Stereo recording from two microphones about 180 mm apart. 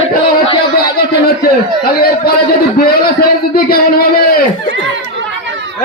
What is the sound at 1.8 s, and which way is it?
A man's voice, 60° left (ahead or behind).